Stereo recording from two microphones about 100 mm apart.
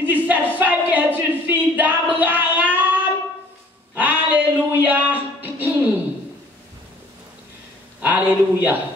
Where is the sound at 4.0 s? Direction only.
15° right (ahead or behind).